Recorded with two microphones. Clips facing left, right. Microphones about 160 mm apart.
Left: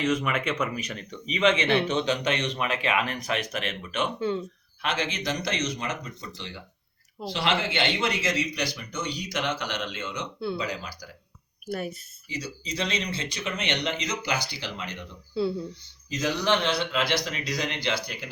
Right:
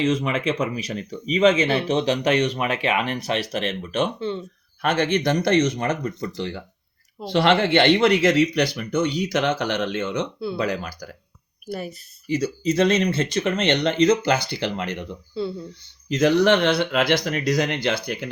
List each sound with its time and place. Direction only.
0.0 s speech: 30° right (ahead or behind)
4.2 s speech: 10° left (ahead or behind)
4.8 s speech: 55° right (ahead or behind)
11.6 s speech: centre (ahead or behind)
12.4 s speech: 55° right (ahead or behind)
15.3 s speech: 5° left (ahead or behind)
16.0 s speech: 60° right (ahead or behind)